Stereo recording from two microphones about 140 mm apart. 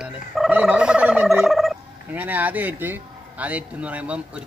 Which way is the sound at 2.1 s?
10° right (ahead or behind).